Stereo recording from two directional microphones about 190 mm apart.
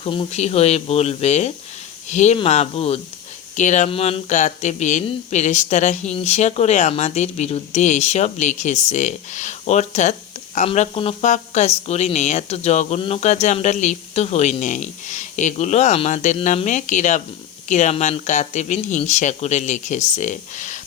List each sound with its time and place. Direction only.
0.0 s speech: 30° left (ahead or behind)